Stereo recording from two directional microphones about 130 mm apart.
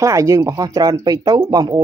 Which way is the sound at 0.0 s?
25° right (ahead or behind).